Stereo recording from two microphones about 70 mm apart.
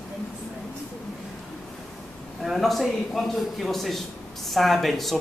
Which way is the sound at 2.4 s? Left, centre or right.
Centre.